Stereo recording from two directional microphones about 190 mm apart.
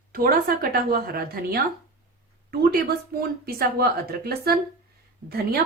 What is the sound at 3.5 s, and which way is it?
A woman's voice, 55° right (ahead or behind).